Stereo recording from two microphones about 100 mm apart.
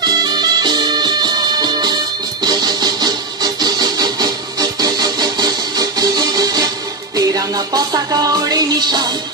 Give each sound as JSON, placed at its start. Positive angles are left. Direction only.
{"t": 0.0, "sound": "music", "side_deg": -45}
{"t": 2.4, "sound": "vehicle", "side_deg": -45}
{"t": 7.2, "sound": "music", "side_deg": -40}